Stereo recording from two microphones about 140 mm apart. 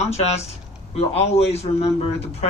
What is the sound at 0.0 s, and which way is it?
A man's voice, 50° left (ahead or behind).